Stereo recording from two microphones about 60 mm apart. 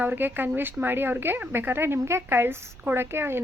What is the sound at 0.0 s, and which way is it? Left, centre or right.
Speech, right.